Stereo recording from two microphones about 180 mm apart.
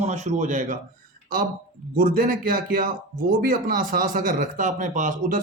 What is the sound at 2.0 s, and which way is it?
Speech, 50° right (ahead or behind).